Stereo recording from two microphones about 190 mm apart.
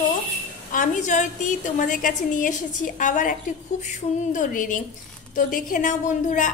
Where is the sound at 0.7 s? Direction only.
40° left (ahead or behind).